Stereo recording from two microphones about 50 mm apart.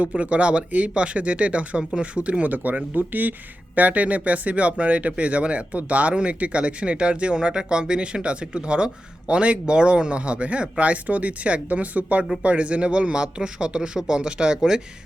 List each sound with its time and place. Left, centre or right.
0.2 s speech: right